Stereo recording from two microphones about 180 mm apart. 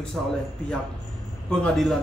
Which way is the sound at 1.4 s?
Centre (ahead or behind).